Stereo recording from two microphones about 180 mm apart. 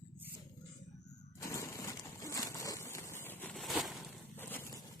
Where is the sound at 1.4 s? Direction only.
15° left (ahead or behind).